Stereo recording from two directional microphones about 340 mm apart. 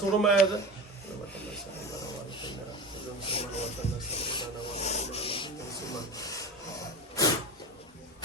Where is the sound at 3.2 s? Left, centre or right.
Centre.